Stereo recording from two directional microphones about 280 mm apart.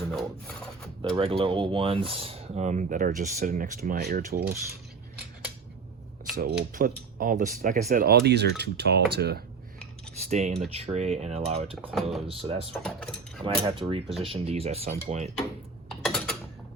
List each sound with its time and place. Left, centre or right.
0.1 s filing: centre
1.1 s speech: centre
6.3 s speech: right
10.2 s speech: right
11.8 s filing: centre
12.3 s speech: right
12.7 s speech: centre
13.4 s speech: centre
15.9 s mechanisms: centre